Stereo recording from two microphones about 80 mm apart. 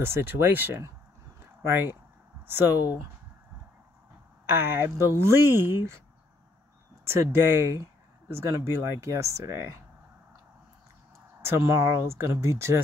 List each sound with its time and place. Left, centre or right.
0.0 s speech: right
4.5 s speech: right
7.1 s speech: right
11.4 s speech: right